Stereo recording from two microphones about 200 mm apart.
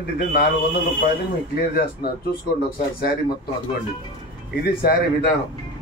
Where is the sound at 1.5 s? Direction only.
50° left (ahead or behind).